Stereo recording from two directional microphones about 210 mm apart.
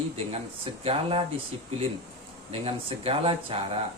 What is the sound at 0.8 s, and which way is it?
Speech, 25° right (ahead or behind).